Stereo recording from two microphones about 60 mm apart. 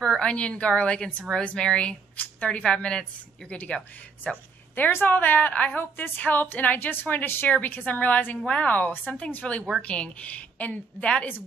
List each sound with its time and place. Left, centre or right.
0.0 s a woman's voice: centre
4.7 s a woman's voice: left